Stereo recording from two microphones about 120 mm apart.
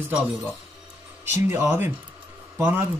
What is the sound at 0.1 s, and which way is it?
Speech, 15° right (ahead or behind).